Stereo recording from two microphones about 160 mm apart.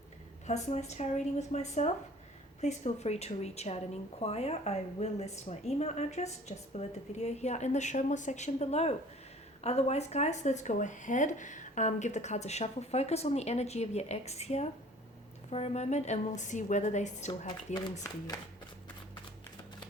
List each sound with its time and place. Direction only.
0.4 s speech: 45° left (ahead or behind)